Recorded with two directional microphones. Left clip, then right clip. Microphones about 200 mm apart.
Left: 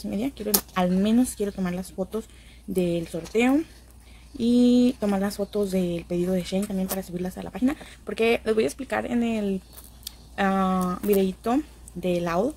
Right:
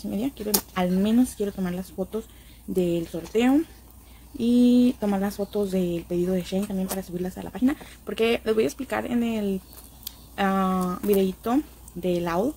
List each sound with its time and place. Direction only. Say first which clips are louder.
0.0 s speech: even; centre (ahead or behind)